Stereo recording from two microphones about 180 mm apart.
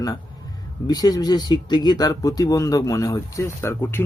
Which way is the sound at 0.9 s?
20° left (ahead or behind).